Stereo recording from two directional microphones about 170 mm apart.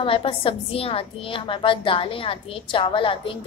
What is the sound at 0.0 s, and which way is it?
A woman's voice, 30° left (ahead or behind).